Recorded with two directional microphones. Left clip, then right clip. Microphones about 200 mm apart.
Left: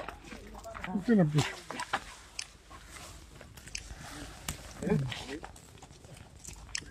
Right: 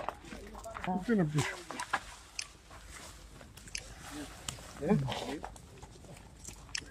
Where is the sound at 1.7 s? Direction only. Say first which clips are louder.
Left 1 dB; 30° left (ahead or behind).